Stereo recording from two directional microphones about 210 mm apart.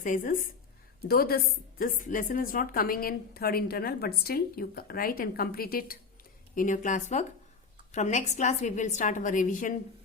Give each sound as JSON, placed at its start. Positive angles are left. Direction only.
{"t": 0.0, "sound": "a woman's voice", "side_deg": 40}